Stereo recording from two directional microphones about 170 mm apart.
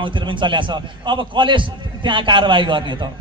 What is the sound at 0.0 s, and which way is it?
A man's voice, 30° right (ahead or behind).